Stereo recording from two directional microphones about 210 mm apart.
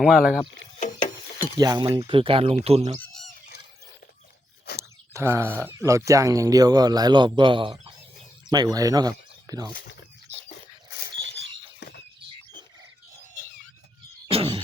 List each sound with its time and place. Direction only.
0.0 s speech: centre (ahead or behind)
1.5 s a man's voice: 20° right (ahead or behind)
3.0 s fowl: centre (ahead or behind)
4.8 s a man's voice: 10° right (ahead or behind)
11.8 s a sound: 50° left (ahead or behind)
14.3 s a sound: 25° right (ahead or behind)